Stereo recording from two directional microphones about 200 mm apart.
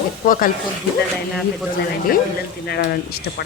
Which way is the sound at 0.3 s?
45° left (ahead or behind).